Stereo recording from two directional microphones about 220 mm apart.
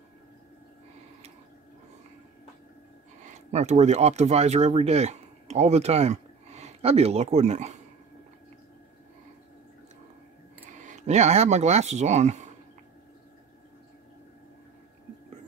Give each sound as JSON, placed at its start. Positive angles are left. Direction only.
{"t": 3.3, "sound": "speech", "side_deg": -30}
{"t": 10.7, "sound": "speech", "side_deg": -35}